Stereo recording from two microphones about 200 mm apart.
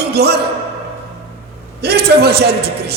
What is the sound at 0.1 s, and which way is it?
Speech, 55° right (ahead or behind).